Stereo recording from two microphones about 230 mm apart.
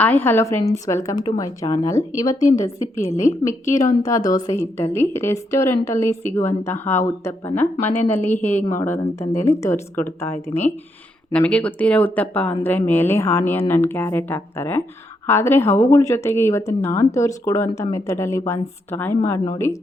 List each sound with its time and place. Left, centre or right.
0.0 s speech: centre
3.1 s a woman's voice: left
3.8 s speech: centre